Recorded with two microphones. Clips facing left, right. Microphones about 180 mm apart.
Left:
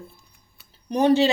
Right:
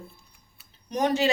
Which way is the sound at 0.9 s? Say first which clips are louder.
Left 6 dB; 30° left (ahead or behind).